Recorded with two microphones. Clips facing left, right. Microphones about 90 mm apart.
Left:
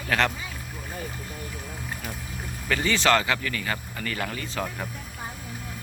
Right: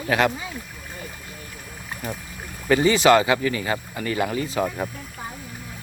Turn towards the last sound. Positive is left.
turn(degrees=-15)  # may be behind; listen again after turning